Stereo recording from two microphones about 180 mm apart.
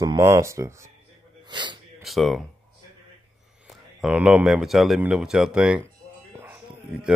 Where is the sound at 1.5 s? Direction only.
25° right (ahead or behind).